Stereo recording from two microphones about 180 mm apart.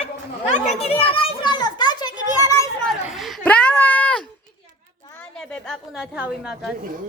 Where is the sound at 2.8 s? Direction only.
Centre (ahead or behind).